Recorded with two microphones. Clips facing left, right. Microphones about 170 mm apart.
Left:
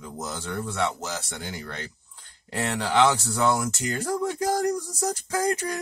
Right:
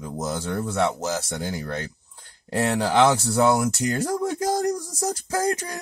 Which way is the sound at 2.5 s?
30° right (ahead or behind).